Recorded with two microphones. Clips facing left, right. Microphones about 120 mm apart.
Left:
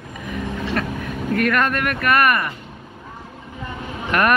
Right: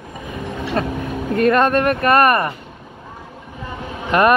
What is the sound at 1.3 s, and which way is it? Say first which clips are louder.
Speech: right 5 dB; 30° right (ahead or behind).